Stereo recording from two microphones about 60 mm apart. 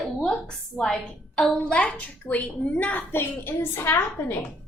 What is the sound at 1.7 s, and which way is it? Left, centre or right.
A woman's voice, left.